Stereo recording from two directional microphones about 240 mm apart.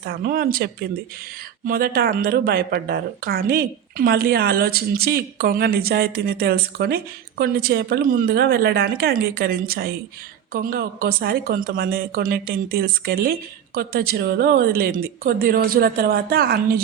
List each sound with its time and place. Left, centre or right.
0.0 s speech: right